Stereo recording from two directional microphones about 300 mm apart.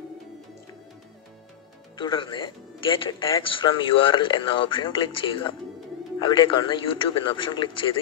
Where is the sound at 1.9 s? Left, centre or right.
Centre.